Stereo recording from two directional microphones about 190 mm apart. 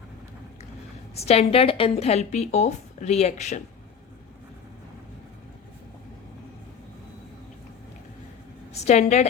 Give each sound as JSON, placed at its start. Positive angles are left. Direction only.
{"t": 1.1, "sound": "a woman's voice", "side_deg": 35}
{"t": 8.7, "sound": "a woman's voice", "side_deg": 35}